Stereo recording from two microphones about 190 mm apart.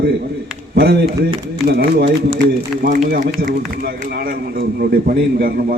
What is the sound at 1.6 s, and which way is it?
Speech, 55° right (ahead or behind).